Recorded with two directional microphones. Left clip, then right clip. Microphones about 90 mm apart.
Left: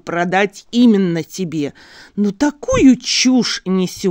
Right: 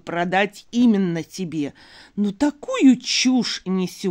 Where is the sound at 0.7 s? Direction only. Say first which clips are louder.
Left 6 dB; 60° left (ahead or behind).